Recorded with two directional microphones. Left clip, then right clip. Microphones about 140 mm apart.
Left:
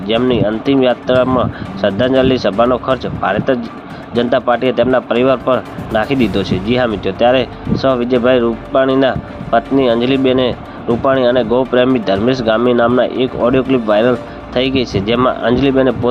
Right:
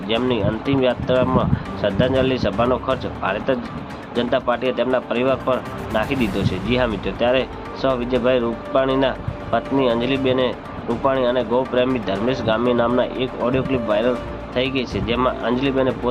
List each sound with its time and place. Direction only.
0.1 s speech: 35° left (ahead or behind)